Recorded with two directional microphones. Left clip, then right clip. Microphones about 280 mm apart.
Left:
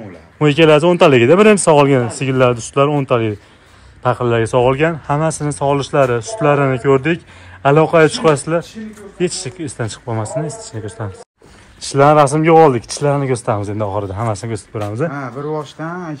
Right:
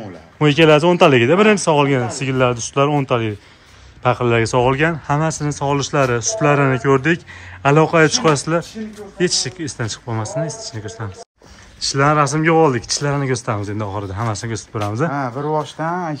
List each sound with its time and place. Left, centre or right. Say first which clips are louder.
0.4 s speech: left 2 dB; centre
15.1 s speech: right 2 dB; right